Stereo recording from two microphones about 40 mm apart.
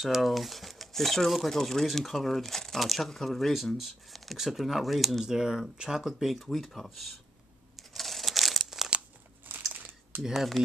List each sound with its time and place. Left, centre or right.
0.0 s speech: centre
6.5 s speech: centre
7.7 s crumpling: centre
9.8 s a sound: right
10.2 s speech: centre